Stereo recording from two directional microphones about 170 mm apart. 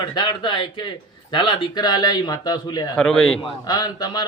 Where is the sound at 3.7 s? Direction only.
25° left (ahead or behind).